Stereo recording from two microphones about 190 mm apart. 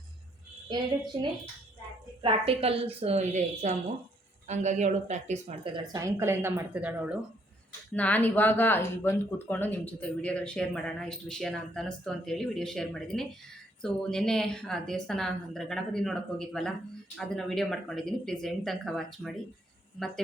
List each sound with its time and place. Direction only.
0.7 s a woman's voice: 20° right (ahead or behind)
2.2 s a woman's voice: 30° right (ahead or behind)
5.7 s speech: 20° right (ahead or behind)
7.9 s speech: 10° left (ahead or behind)